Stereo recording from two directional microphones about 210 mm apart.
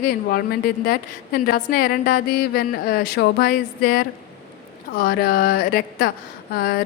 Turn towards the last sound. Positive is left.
turn(degrees=45)  # may be behind; listen again after turning